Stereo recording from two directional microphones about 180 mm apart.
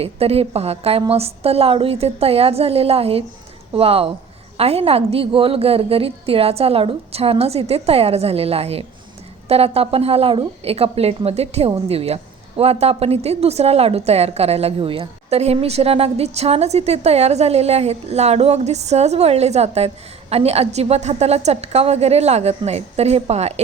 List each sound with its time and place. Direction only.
0.0 s a woman's voice: 35° right (ahead or behind)